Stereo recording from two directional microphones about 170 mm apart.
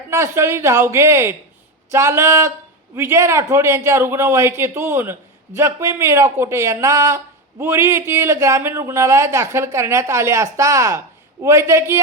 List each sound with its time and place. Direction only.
0.1 s speech: 15° right (ahead or behind)